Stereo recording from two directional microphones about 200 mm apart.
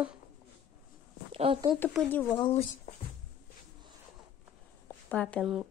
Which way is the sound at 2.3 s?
25° left (ahead or behind).